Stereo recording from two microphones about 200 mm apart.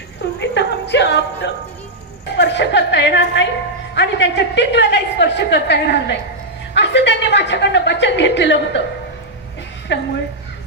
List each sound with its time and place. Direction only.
0.4 s music: 60° left (ahead or behind)
3.9 s a woman's voice: 60° left (ahead or behind)
9.9 s a woman's voice: 60° left (ahead or behind)